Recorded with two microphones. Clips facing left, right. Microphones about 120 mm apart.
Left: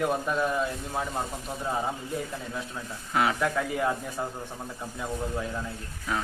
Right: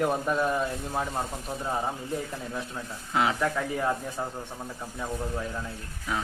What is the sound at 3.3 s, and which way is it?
Speech, centre (ahead or behind).